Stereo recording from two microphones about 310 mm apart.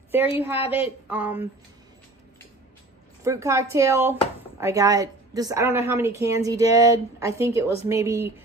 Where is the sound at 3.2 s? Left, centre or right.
Centre.